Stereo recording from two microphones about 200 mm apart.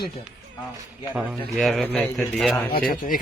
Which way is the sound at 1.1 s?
Centre (ahead or behind).